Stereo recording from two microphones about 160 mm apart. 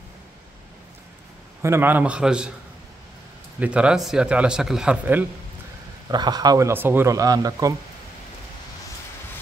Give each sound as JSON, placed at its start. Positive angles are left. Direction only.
{"t": 1.6, "sound": "a man's voice", "side_deg": -15}
{"t": 3.5, "sound": "a man's voice", "side_deg": -10}
{"t": 6.0, "sound": "speech", "side_deg": -25}